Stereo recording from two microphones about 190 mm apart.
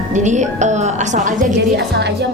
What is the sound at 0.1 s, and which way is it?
A woman's voice, 40° right (ahead or behind).